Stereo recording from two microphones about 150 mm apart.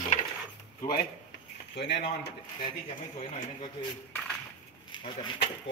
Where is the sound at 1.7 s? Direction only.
90° left.